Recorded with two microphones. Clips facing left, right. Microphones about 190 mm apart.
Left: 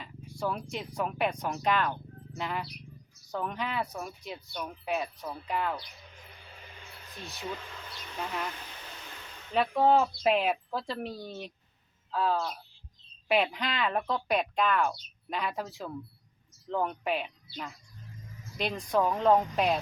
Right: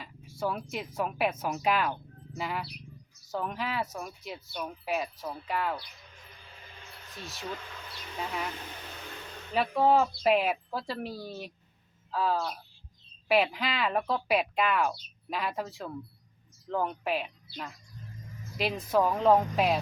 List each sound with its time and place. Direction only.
0.0 s speech: centre (ahead or behind)
7.1 s speech: centre (ahead or behind)
9.5 s speech: centre (ahead or behind)